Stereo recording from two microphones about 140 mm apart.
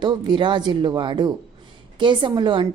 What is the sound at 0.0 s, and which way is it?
A woman's voice, 35° right (ahead or behind).